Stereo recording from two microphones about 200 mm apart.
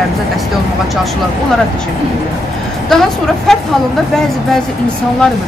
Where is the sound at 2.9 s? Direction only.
5° left (ahead or behind).